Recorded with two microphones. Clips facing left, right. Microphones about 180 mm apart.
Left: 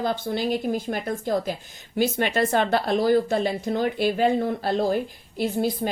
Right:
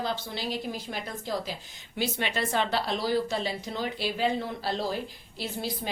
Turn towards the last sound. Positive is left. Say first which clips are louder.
# left 10 dB
turn(degrees=50)  # may be behind; listen again after turning